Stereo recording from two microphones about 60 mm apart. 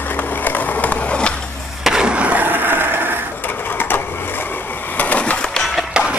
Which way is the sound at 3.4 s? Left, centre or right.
Left.